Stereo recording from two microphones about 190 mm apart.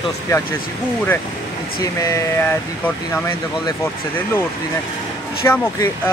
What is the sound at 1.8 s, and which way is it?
Speech, 15° left (ahead or behind).